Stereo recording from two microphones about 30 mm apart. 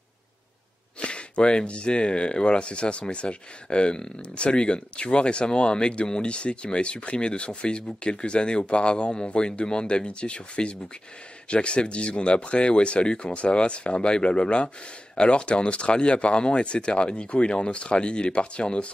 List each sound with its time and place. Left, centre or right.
0.9 s speech: left